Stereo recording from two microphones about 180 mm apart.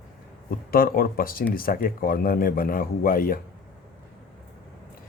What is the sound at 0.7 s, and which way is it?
Speech, 55° left (ahead or behind).